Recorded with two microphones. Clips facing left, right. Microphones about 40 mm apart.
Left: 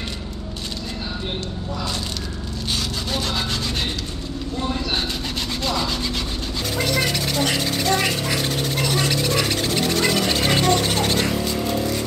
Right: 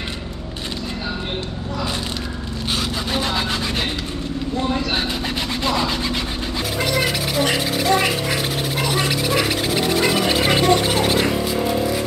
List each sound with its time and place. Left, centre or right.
3.1 s sawing: centre
5.7 s rub: centre
6.8 s a sound: centre